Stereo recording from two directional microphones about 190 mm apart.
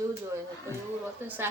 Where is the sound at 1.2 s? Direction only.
10° right (ahead or behind).